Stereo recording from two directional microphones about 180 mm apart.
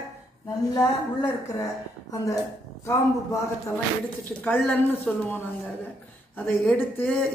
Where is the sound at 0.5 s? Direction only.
20° left (ahead or behind).